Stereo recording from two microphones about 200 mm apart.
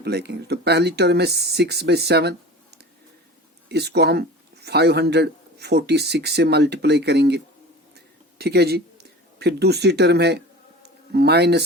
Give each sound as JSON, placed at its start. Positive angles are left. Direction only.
{"t": 0.0, "sound": "speech", "side_deg": -55}
{"t": 3.7, "sound": "speech", "side_deg": -55}
{"t": 7.9, "sound": "a sound", "side_deg": -55}
{"t": 11.1, "sound": "speech", "side_deg": -55}